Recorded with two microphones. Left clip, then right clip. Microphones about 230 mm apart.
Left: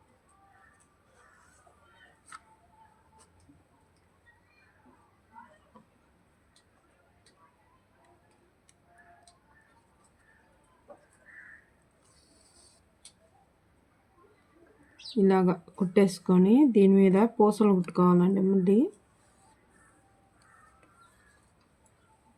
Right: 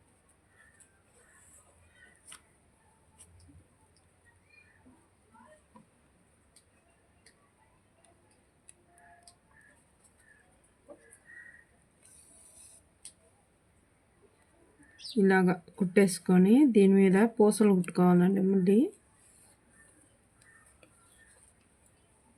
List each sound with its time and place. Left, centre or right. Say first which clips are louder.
15.2 s speech: left 1 dB; centre